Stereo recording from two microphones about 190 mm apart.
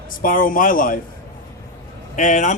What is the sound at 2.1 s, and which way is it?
Speech, 40° left (ahead or behind).